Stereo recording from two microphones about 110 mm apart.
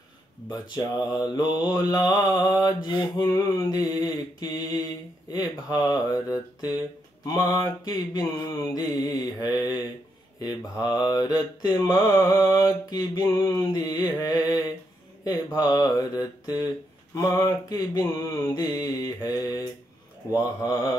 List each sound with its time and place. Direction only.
0.5 s mantra: 35° left (ahead or behind)